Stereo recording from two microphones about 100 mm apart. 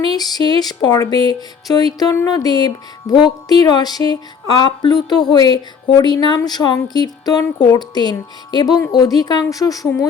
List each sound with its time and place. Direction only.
0.0 s music: 40° left (ahead or behind)
8.9 s a woman's voice: 40° left (ahead or behind)